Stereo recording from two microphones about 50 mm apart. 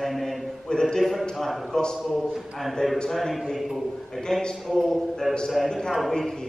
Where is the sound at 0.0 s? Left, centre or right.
Centre.